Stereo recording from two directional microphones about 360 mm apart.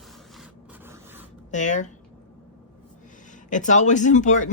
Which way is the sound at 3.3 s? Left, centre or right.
Left.